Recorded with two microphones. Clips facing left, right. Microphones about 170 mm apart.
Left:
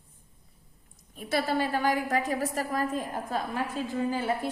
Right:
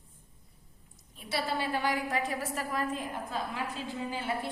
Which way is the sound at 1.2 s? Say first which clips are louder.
Left 5 dB; 50° left (ahead or behind).